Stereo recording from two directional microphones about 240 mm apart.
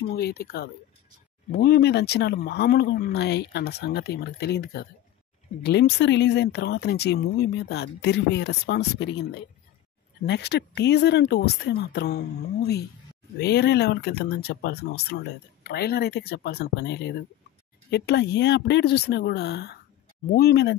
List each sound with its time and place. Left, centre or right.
0.1 s speech: left